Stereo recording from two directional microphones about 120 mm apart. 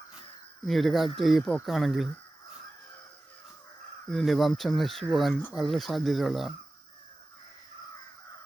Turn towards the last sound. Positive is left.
turn(degrees=0)  # may be behind; listen again after turning